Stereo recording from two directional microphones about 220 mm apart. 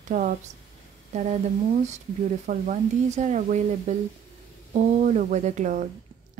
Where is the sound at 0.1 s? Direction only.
35° right (ahead or behind).